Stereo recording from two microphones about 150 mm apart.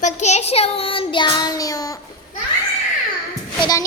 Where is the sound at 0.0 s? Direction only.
50° left (ahead or behind); by 2.0 s 25° left (ahead or behind).